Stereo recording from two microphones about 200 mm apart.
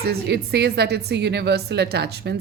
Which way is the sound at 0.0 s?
55° right (ahead or behind).